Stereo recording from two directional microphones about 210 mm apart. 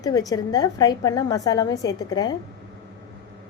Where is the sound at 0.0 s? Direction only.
15° left (ahead or behind).